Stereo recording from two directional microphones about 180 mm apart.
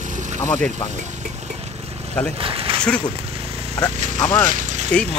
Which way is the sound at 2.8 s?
5° left (ahead or behind).